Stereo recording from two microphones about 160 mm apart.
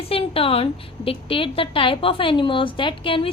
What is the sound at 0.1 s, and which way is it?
A woman's voice, 35° left (ahead or behind).